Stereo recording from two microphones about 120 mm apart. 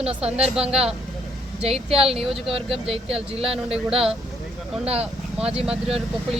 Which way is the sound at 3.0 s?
55° right (ahead or behind).